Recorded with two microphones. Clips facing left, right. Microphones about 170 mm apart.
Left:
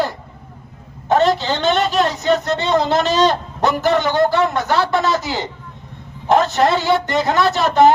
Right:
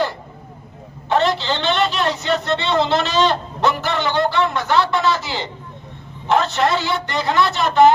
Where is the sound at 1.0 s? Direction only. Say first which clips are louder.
Left 3 dB; 45° left (ahead or behind).